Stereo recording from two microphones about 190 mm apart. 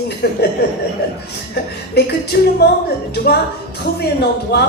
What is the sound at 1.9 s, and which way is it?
A woman's voice, 60° left (ahead or behind).